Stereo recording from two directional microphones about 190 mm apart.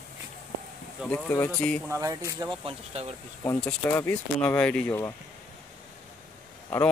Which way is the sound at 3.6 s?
10° left (ahead or behind).